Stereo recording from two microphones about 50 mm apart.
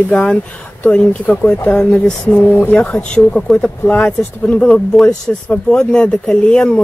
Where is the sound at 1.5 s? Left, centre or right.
Left.